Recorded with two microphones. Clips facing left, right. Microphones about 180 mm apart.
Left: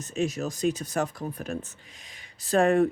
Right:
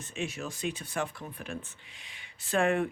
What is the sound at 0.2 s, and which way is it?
Speech, 40° left (ahead or behind).